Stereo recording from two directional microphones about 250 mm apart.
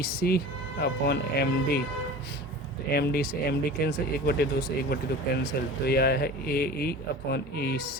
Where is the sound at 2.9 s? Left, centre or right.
Left.